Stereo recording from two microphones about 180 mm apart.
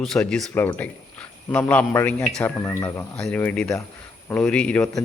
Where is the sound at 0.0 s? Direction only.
5° left (ahead or behind).